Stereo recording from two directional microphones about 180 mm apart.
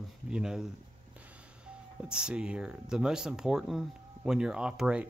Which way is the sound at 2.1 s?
5° right (ahead or behind).